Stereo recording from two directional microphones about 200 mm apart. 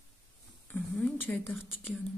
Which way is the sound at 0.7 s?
10° left (ahead or behind).